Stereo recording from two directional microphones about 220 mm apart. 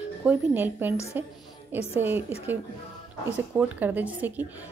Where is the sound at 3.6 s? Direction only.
10° right (ahead or behind).